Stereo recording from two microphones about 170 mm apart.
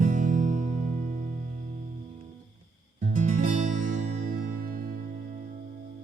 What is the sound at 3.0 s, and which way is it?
Music, 45° right (ahead or behind).